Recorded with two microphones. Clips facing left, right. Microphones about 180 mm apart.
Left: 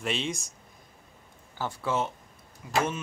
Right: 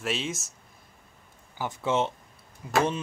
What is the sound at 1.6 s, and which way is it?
Speech, 20° right (ahead or behind).